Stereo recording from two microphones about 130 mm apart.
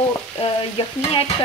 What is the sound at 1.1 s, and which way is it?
Frying, 45° left (ahead or behind).